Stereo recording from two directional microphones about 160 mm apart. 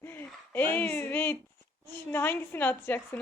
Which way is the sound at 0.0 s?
15° left (ahead or behind).